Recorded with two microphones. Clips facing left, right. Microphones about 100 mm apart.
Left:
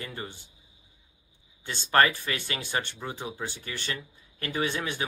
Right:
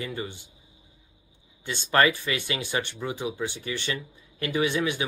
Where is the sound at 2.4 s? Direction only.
45° left (ahead or behind).